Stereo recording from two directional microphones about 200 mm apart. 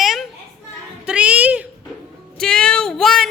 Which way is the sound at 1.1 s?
5° right (ahead or behind).